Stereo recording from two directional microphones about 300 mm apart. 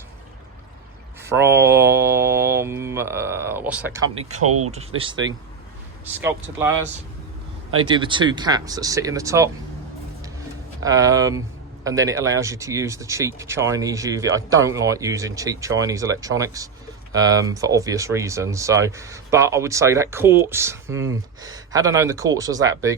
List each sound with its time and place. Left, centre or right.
1.2 s mantra: centre
4.4 s speech: right
6.1 s speech: centre
10.8 s speech: centre